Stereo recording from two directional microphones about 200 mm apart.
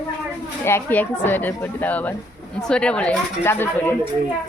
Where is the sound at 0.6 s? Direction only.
10° left (ahead or behind).